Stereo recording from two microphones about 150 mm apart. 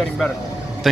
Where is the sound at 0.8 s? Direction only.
Centre (ahead or behind).